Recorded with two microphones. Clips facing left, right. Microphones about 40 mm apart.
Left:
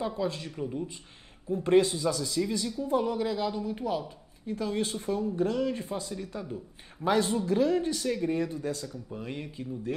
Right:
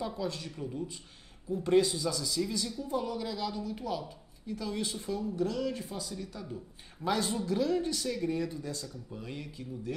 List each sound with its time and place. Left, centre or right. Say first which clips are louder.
0.0 s speech: left 4 dB; left